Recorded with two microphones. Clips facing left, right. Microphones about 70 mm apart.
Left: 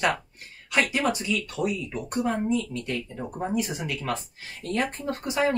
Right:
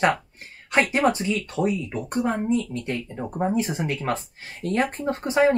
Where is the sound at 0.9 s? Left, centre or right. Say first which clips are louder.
Right 4 dB; right.